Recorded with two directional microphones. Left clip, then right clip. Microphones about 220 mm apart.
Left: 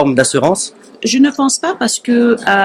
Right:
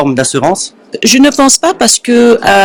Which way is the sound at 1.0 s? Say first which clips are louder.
Right 6 dB; 50° right (ahead or behind).